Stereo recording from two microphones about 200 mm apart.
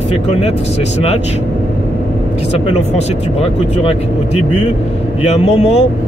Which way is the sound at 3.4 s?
30° left (ahead or behind).